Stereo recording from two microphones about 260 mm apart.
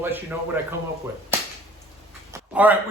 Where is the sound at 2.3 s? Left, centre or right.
Centre.